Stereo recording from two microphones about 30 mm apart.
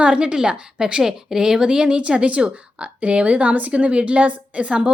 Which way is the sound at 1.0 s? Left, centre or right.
Centre.